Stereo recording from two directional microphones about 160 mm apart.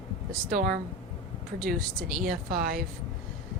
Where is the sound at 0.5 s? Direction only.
75° right (ahead or behind).